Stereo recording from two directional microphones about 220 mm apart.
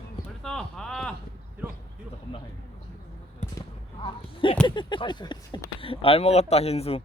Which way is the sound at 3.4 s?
30° left (ahead or behind).